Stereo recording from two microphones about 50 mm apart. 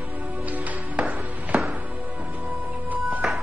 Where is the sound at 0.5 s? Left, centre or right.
Right.